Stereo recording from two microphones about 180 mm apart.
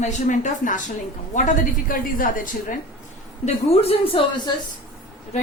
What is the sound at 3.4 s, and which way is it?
Speech, 35° left (ahead or behind).